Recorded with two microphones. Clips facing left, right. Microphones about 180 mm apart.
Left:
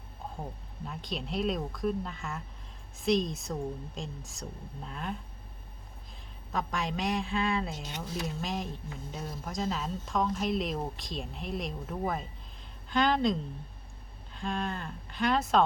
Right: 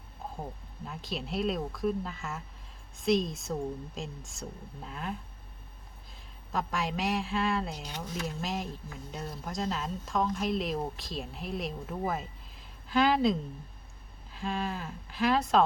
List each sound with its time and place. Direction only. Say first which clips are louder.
0.9 s speech: even; centre (ahead or behind)
6.5 s speech: right 1 dB; centre (ahead or behind)
7.9 s speech: even; 25° left (ahead or behind)
8.4 s speech: even; centre (ahead or behind)